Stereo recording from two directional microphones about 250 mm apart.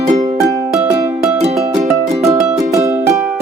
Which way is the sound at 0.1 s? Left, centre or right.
Right.